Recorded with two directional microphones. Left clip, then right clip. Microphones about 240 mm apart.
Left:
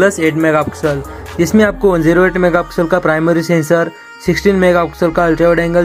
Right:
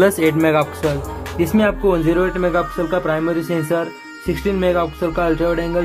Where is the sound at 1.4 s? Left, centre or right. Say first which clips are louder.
Left 6 dB; centre.